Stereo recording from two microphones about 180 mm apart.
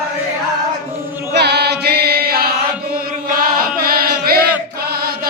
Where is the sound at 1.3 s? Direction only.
70° right (ahead or behind).